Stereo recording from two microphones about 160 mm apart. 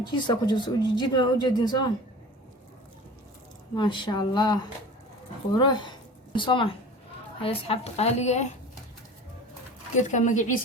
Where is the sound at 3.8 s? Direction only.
30° left (ahead or behind).